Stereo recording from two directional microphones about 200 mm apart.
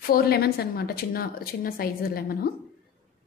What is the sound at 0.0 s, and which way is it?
A woman's voice, 50° left (ahead or behind).